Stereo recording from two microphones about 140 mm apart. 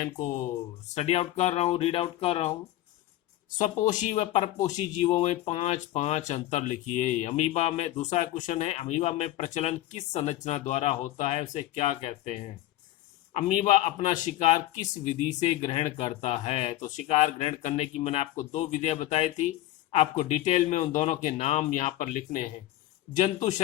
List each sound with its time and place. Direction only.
0.0 s speech: 65° left (ahead or behind)
0.9 s speech: 50° left (ahead or behind)
3.6 s speech: 65° left (ahead or behind)
13.8 s speech: 55° left (ahead or behind)
15.6 s speech: 45° left (ahead or behind)
23.1 s speech: 60° left (ahead or behind)